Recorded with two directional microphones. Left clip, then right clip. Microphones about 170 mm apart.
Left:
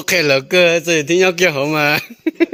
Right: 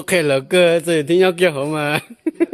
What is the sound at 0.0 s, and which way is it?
Speech, centre (ahead or behind).